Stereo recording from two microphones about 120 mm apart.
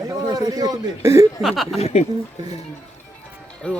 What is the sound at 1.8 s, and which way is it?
Speech, 65° left (ahead or behind).